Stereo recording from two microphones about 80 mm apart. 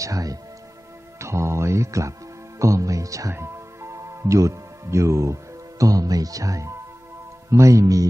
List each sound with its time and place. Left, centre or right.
0.0 s speech: right
1.2 s speech: right
3.3 s music: right
5.8 s speech: right